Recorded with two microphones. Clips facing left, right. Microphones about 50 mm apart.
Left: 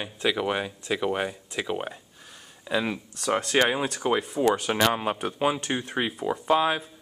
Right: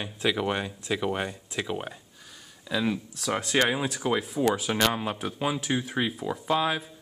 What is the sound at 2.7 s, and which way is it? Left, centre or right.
Speech, centre.